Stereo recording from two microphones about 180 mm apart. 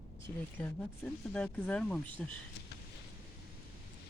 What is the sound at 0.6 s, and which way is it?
Speech, 5° left (ahead or behind).